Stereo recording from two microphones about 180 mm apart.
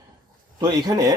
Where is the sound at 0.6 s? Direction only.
20° right (ahead or behind).